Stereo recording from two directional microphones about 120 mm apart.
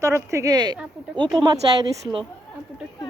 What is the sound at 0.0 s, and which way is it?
Speech, 25° right (ahead or behind).